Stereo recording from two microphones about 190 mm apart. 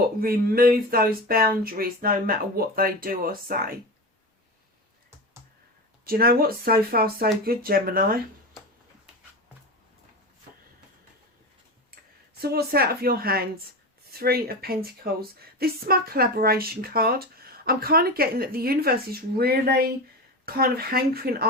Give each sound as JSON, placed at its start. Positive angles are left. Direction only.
{"t": 0.2, "sound": "a woman's voice", "side_deg": -50}
{"t": 6.1, "sound": "a woman's voice", "side_deg": -50}
{"t": 12.4, "sound": "a woman's voice", "side_deg": -55}